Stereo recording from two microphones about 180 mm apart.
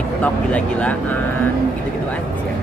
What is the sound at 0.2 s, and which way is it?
Speech, 5° left (ahead or behind).